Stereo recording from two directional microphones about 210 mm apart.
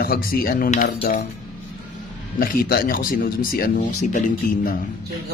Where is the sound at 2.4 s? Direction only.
45° left (ahead or behind).